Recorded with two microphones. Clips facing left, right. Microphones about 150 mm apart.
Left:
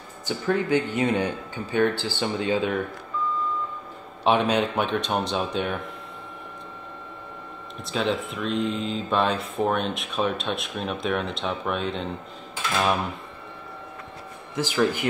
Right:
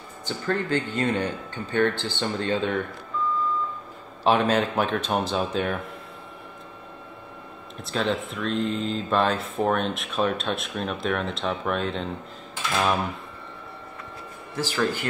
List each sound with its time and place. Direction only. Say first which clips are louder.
0.3 s speech: left 3 dB; 10° left (ahead or behind)
4.2 s speech: even; centre (ahead or behind)
7.8 s speech: even; centre (ahead or behind)
14.5 s speech: left 2 dB; 15° left (ahead or behind)